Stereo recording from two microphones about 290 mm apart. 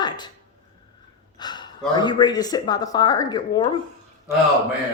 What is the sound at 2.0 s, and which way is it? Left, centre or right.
A woman's voice, centre.